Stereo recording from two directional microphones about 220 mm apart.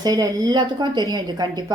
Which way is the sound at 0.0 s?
15° right (ahead or behind).